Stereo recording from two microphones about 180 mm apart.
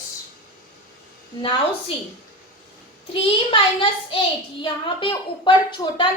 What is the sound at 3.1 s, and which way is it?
A woman's voice, 30° left (ahead or behind).